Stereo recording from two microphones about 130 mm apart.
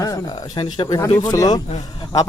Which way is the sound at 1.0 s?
25° left (ahead or behind).